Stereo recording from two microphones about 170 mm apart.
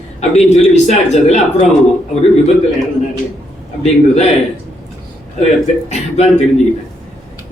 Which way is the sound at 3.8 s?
40° left (ahead or behind).